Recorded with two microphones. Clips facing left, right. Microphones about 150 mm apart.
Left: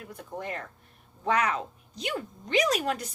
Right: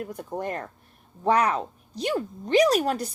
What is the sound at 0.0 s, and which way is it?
A woman's voice, 45° right (ahead or behind).